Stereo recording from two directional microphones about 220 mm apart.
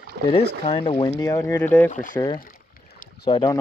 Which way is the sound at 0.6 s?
25° left (ahead or behind).